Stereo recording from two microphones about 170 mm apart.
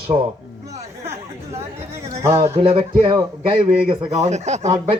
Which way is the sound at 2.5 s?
35° right (ahead or behind).